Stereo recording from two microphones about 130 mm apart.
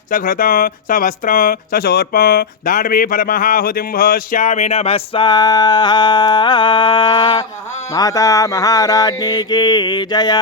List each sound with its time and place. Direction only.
0.1 s speech: 90° left; by 7.4 s 35° left (ahead or behind)
7.9 s mantra: 25° left (ahead or behind)